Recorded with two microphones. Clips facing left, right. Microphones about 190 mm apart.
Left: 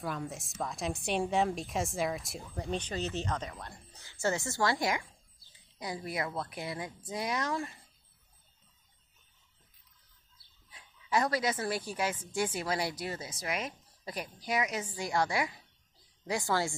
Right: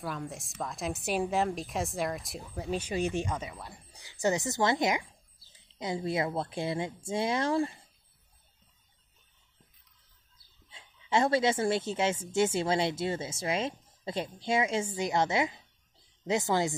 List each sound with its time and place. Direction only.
0.0 s a woman's voice: centre (ahead or behind); by 7.8 s 30° right (ahead or behind)
10.7 s speech: 25° right (ahead or behind)